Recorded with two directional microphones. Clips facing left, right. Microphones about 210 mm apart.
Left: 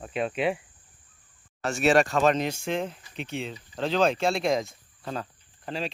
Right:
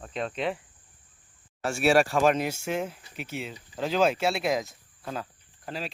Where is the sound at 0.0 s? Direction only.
10° left (ahead or behind).